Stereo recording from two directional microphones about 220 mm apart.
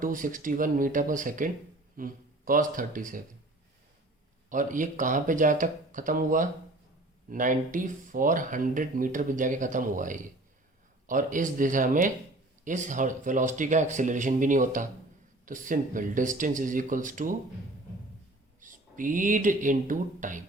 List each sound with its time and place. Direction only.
0.0 s speech: 35° right (ahead or behind)
4.4 s speech: 35° right (ahead or behind)
18.6 s speech: 35° right (ahead or behind)